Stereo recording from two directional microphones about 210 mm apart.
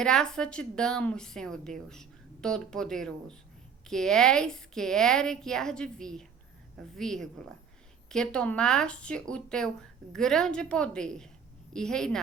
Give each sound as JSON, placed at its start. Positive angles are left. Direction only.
{"t": 0.0, "sound": "a woman's voice", "side_deg": 5}